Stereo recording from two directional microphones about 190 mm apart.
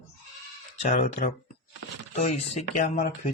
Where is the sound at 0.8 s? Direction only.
40° left (ahead or behind).